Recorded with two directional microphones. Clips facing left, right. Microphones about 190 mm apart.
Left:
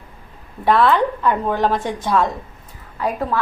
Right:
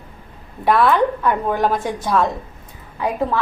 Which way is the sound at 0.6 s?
10° right (ahead or behind).